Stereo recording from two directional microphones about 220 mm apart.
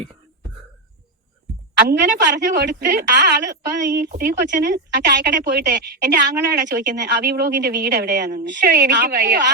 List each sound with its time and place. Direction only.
1.9 s a woman's voice: 45° right (ahead or behind)